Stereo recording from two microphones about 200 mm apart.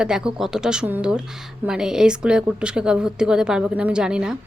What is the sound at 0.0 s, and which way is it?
Speech, 5° right (ahead or behind).